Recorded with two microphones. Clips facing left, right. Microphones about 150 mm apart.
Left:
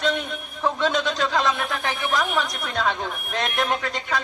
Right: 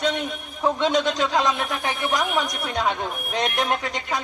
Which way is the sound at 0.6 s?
15° right (ahead or behind).